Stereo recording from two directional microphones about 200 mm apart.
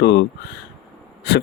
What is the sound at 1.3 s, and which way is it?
Speech, 55° left (ahead or behind).